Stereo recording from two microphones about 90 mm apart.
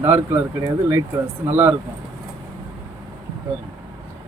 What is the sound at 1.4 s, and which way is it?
Speech, 25° right (ahead or behind).